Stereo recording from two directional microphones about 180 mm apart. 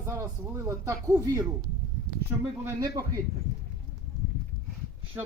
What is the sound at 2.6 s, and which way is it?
Speech, 20° right (ahead or behind).